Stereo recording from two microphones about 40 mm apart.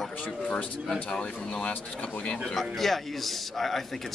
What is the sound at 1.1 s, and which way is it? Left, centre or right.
Speech, left.